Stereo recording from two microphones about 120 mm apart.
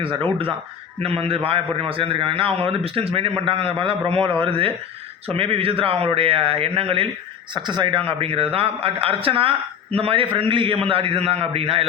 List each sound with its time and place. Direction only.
0.0 s a man's voice: 45° right (ahead or behind)
7.5 s a man's voice: 40° right (ahead or behind)